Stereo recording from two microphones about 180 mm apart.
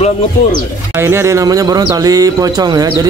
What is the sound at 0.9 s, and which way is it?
Speech, 15° right (ahead or behind).